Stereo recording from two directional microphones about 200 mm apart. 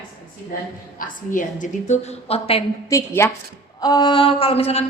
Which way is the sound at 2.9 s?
15° left (ahead or behind).